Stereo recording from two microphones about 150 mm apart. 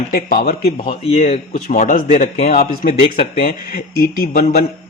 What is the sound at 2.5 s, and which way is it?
Speech, 70° left (ahead or behind).